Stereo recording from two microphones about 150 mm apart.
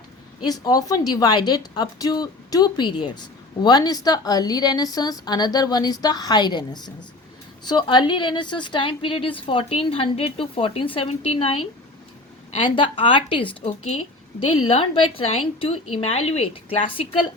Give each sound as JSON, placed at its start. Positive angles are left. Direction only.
{"t": 0.4, "sound": "a woman's voice", "side_deg": 25}
{"t": 12.7, "sound": "a woman's voice", "side_deg": 35}
{"t": 13.5, "sound": "a woman's voice", "side_deg": 45}
{"t": 15.3, "sound": "a woman's voice", "side_deg": 40}